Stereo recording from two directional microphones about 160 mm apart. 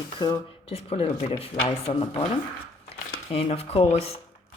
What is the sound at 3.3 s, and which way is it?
Speech, 35° left (ahead or behind).